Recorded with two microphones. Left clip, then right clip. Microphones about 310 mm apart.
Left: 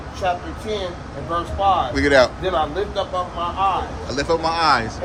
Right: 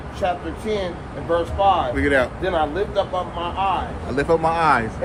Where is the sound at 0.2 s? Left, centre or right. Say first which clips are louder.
Even; centre.